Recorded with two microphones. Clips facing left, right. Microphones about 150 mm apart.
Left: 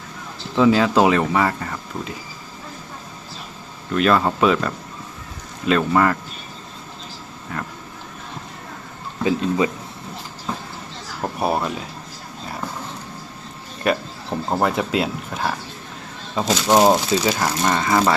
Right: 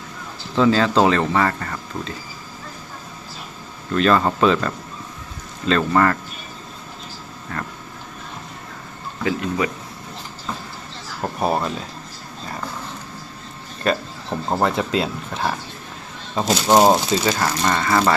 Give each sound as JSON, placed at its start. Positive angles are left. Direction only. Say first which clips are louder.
{"t": 0.5, "sound": "speech", "louder": "left 1 dB", "side_deg": 10}
{"t": 3.9, "sound": "speech", "louder": "even", "side_deg": 5}
{"t": 7.5, "sound": "speech", "louder": "even", "side_deg": 10}
{"t": 9.2, "sound": "speech", "louder": "left 3 dB", "side_deg": 20}
{"t": 11.2, "sound": "speech", "louder": "even", "side_deg": 5}
{"t": 13.8, "sound": "speech", "louder": "even", "side_deg": 5}